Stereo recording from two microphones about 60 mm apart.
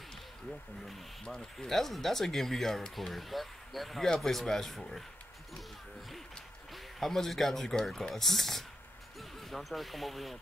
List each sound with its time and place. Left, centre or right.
0.5 s speech: centre
6.7 s speech: centre